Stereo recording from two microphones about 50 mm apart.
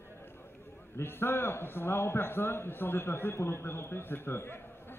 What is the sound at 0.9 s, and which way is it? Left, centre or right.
A man's voice, left.